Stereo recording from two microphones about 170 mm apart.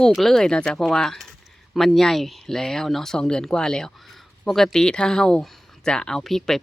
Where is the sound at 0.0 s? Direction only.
Centre (ahead or behind).